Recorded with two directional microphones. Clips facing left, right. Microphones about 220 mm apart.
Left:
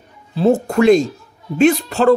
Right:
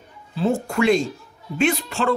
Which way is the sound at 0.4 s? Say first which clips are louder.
Left 7 dB; 40° left (ahead or behind).